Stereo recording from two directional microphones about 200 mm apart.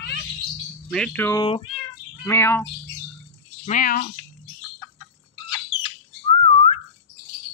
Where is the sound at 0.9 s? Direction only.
5° left (ahead or behind).